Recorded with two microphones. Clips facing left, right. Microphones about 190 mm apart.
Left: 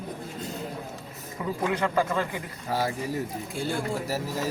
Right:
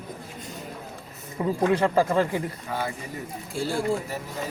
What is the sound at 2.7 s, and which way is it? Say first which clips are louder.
Speech: left 3 dB; 35° left (ahead or behind).